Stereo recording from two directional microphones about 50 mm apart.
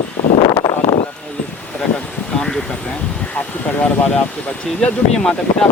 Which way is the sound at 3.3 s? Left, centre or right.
Left.